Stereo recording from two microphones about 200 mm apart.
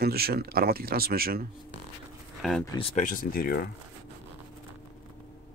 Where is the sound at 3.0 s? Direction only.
45° left (ahead or behind).